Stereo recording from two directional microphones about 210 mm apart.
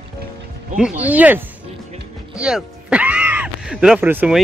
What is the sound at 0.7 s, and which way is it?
Speech, 5° right (ahead or behind).